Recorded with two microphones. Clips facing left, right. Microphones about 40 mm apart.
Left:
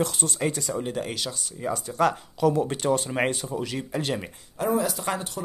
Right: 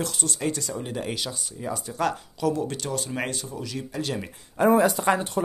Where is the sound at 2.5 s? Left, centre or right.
Left.